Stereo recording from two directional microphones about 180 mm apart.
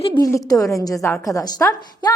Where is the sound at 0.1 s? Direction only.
15° left (ahead or behind).